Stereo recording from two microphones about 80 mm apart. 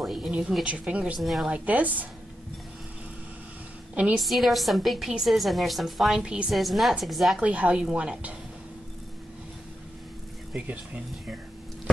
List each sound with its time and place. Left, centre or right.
0.0 s a sound: centre
0.3 s a woman's voice: centre
1.2 s a woman's voice: centre
1.5 s a woman's voice: centre
3.9 s a woman's voice: centre
4.2 s a woman's voice: centre
6.5 s a woman's voice: centre
7.4 s a woman's voice: centre